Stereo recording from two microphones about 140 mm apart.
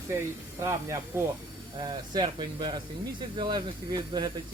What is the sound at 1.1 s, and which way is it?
Speech, 15° right (ahead or behind).